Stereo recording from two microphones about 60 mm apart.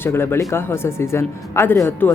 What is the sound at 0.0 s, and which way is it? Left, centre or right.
Speech, left.